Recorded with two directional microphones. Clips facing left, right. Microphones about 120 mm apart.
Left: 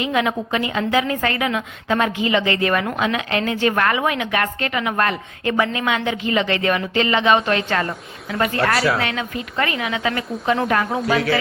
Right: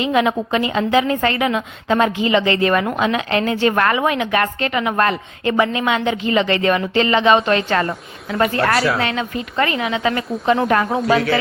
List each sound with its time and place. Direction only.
0.0 s a woman's voice: 25° right (ahead or behind)
9.0 s a woman's voice: 30° right (ahead or behind)
11.0 s a man's voice: centre (ahead or behind)